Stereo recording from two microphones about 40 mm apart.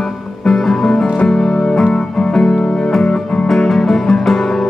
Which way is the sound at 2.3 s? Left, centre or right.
Centre.